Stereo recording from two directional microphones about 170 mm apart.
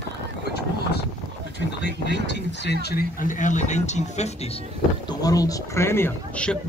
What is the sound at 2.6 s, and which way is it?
Speech, 75° left (ahead or behind).